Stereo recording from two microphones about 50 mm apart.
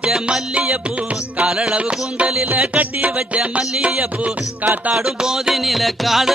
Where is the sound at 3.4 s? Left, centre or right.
Centre.